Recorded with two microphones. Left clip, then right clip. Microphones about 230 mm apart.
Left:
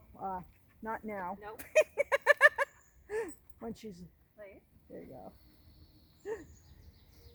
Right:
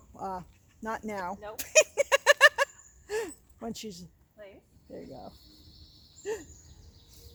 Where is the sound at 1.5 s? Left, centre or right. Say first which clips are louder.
Right 5 dB; right.